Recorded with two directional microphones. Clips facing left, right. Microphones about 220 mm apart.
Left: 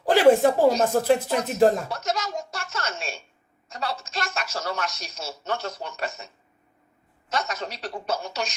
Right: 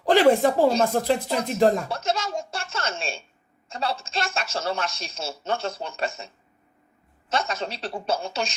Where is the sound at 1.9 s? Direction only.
30° right (ahead or behind).